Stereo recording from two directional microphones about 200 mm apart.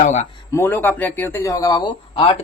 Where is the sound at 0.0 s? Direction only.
35° left (ahead or behind).